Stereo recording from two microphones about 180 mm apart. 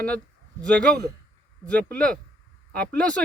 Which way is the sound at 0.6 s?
5° left (ahead or behind).